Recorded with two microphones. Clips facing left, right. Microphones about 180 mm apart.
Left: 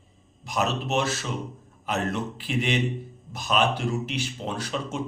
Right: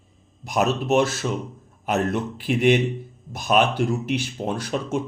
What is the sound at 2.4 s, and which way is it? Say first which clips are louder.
Speech: right 9 dB; 55° right (ahead or behind).